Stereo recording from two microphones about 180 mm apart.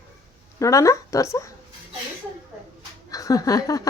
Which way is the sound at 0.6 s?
15° left (ahead or behind).